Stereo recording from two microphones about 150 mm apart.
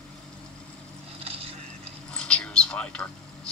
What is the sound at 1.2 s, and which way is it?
Boat, 40° right (ahead or behind).